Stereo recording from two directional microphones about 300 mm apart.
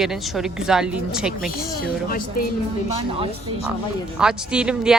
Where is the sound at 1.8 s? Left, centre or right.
Left.